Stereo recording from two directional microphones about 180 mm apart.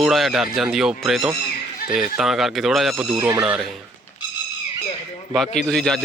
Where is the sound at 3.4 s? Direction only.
5° right (ahead or behind).